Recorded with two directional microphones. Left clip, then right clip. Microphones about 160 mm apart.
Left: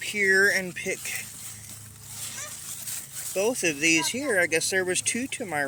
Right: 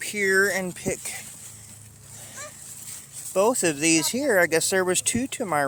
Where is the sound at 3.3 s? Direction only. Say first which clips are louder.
Right 4 dB; 40° right (ahead or behind).